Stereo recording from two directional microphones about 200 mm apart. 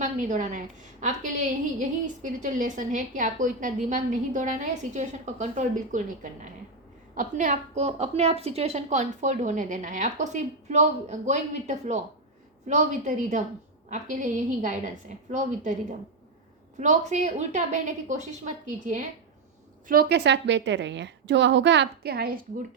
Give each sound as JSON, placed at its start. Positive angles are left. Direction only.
{"t": 0.0, "sound": "a woman's voice", "side_deg": -40}
{"t": 19.9, "sound": "a woman's voice", "side_deg": -50}